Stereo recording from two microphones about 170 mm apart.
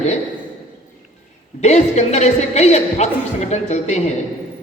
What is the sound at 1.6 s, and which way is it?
Speech, 40° left (ahead or behind).